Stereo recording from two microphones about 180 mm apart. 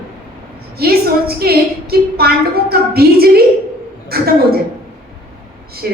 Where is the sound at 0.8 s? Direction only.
60° right (ahead or behind).